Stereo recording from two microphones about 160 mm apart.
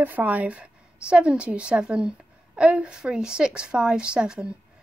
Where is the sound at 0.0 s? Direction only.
10° right (ahead or behind).